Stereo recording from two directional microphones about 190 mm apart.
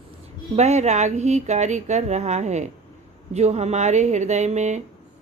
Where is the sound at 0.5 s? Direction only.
35° right (ahead or behind).